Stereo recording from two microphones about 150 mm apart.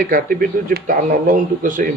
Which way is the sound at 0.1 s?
70° right (ahead or behind).